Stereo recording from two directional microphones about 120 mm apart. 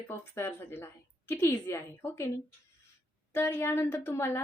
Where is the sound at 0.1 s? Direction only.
20° left (ahead or behind).